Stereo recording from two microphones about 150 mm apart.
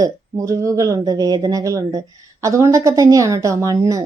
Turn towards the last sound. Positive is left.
turn(degrees=-25)  # may be behind; listen again after turning